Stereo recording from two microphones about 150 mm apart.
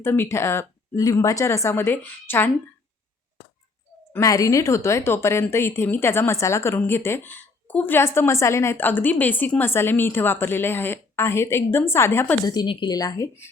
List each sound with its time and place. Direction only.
0.0 s speech: 15° left (ahead or behind)
4.1 s speech: 20° left (ahead or behind)
12.5 s speech: 30° left (ahead or behind)